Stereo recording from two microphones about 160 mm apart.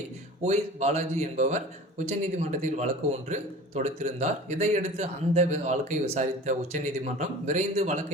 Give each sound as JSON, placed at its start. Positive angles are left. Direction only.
{"t": 0.4, "sound": "a man's voice", "side_deg": -45}